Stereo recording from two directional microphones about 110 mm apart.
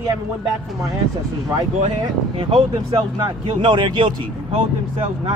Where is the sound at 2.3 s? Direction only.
55° right (ahead or behind).